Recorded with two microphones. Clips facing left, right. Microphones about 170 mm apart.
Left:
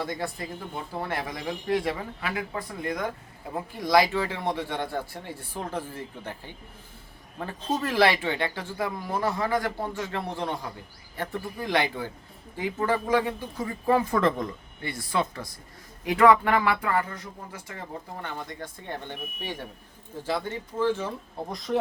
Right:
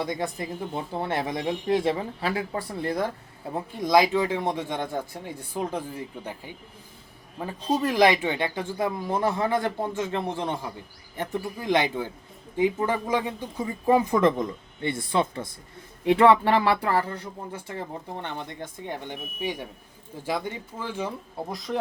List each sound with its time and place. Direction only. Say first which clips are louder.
0.0 s speech: right 3 dB; 15° right (ahead or behind); by 3.1 s 35° right (ahead or behind)
3.8 s speech: right 2 dB; 20° right (ahead or behind)
21.5 s speech: left 3 dB; centre (ahead or behind)